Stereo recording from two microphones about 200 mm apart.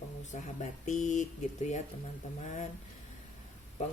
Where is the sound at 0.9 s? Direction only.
40° left (ahead or behind).